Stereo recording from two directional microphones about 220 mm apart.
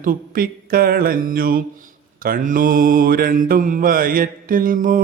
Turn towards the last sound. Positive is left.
turn(degrees=-40)  # may be behind; listen again after turning